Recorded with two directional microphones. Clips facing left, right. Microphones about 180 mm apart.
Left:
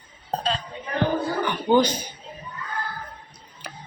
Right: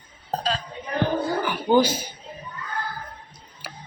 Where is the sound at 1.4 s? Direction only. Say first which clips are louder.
Even; 10° right (ahead or behind).